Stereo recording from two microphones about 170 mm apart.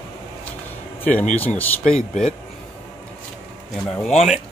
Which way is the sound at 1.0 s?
10° left (ahead or behind).